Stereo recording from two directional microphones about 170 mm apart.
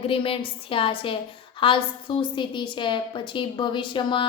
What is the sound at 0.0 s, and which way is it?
A woman's voice, 30° left (ahead or behind).